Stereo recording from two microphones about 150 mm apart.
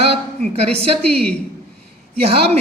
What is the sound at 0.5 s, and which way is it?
Speech, 40° right (ahead or behind).